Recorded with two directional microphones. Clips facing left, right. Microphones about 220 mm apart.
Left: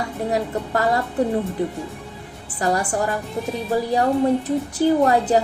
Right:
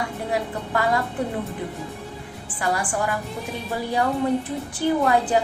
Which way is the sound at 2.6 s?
40° left (ahead or behind).